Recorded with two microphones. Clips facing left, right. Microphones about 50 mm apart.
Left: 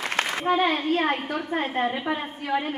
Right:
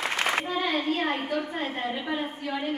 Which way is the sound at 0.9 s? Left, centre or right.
Left.